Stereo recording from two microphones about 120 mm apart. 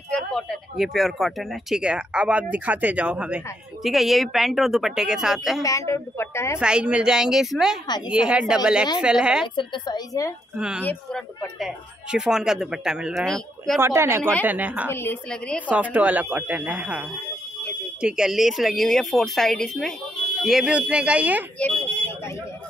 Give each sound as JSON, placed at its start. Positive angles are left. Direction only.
{"t": 0.1, "sound": "speech", "side_deg": 5}
{"t": 5.6, "sound": "a woman's voice", "side_deg": 25}
{"t": 6.6, "sound": "speech", "side_deg": -10}
{"t": 9.6, "sound": "a woman's voice", "side_deg": 40}
{"t": 11.1, "sound": "speech", "side_deg": 5}
{"t": 13.7, "sound": "a woman's voice", "side_deg": -20}
{"t": 14.9, "sound": "a woman's voice", "side_deg": 20}
{"t": 15.7, "sound": "speech", "side_deg": -10}
{"t": 18.0, "sound": "speech", "side_deg": -5}
{"t": 21.5, "sound": "vehicle", "side_deg": 15}